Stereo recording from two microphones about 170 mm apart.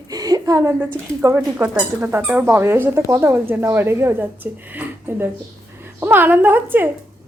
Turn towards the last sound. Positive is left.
turn(degrees=-10)  # may be behind; listen again after turning